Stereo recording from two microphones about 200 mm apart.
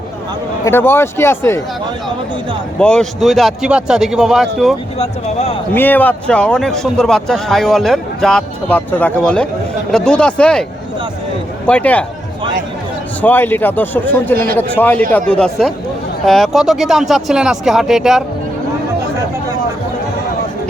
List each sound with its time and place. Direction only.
0.6 s a man's voice: 10° left (ahead or behind)
2.7 s a man's voice: 5° left (ahead or behind)
4.9 s speech: 30° left (ahead or behind)
5.7 s a man's voice: 10° left (ahead or behind)
13.2 s a man's voice: 10° left (ahead or behind)